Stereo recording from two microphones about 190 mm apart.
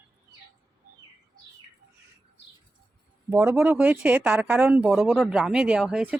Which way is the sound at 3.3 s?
10° right (ahead or behind).